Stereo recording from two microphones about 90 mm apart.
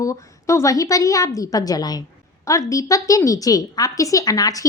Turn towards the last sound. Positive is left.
turn(degrees=40)  # may be behind; listen again after turning